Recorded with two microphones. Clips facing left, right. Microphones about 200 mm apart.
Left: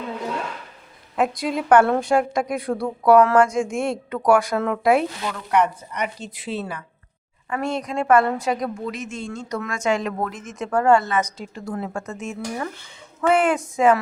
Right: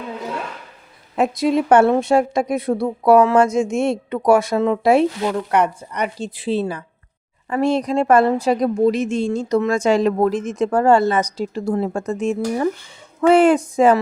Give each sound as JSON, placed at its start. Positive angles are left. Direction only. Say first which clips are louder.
{"t": 1.1, "sound": "a woman's voice", "louder": "right 5 dB", "side_deg": -25}